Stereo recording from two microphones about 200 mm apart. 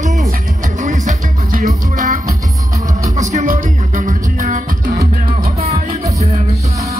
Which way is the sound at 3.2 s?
40° right (ahead or behind).